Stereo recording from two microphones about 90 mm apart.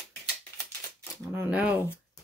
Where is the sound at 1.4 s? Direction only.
15° right (ahead or behind).